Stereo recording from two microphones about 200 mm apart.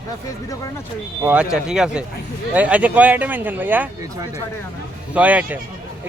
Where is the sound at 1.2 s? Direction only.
5° right (ahead or behind).